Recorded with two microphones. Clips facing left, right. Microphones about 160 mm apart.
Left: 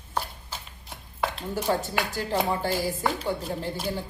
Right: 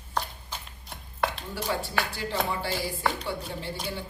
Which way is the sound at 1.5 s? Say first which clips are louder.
Left 3 dB; 45° left (ahead or behind).